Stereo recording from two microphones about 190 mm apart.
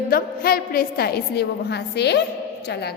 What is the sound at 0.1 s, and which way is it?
A woman's voice, 50° left (ahead or behind).